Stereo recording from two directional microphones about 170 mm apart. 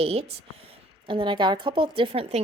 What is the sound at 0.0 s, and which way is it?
A woman's voice, 35° right (ahead or behind).